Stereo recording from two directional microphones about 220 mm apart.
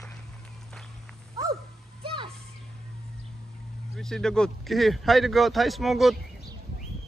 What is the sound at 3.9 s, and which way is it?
Speech, centre (ahead or behind).